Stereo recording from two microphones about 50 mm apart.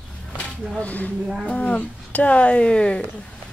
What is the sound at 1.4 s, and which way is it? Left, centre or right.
Speech, left.